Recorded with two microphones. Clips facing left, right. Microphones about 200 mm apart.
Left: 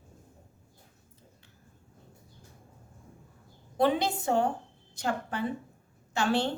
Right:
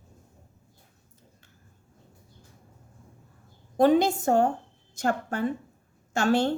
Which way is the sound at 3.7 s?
45° right (ahead or behind).